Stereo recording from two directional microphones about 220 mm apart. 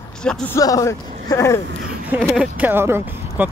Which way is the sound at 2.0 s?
5° right (ahead or behind).